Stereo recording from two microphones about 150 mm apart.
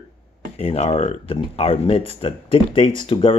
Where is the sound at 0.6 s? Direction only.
45° left (ahead or behind).